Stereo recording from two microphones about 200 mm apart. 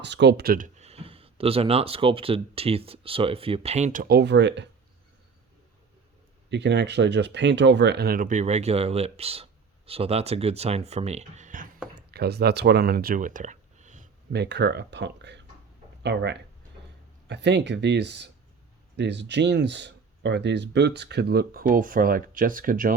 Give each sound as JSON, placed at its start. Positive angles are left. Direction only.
{"t": 0.0, "sound": "speech", "side_deg": -60}
{"t": 4.0, "sound": "speech", "side_deg": -55}
{"t": 6.5, "sound": "speech", "side_deg": -60}
{"t": 11.9, "sound": "speech", "side_deg": -55}
{"t": 14.3, "sound": "speech", "side_deg": -55}